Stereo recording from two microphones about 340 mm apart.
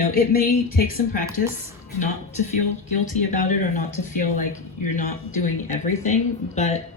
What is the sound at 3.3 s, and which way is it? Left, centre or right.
Speech, left.